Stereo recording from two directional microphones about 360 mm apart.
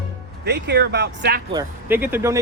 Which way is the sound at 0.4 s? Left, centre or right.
Right.